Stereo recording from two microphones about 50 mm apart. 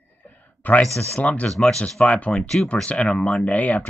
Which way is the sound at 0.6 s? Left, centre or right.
Left.